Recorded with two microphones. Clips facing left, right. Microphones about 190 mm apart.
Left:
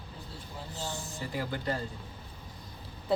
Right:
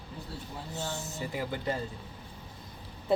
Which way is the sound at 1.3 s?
20° right (ahead or behind).